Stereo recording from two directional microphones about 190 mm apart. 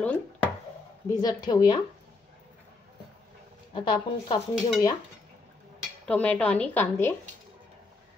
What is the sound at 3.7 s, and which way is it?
Speech, 25° left (ahead or behind).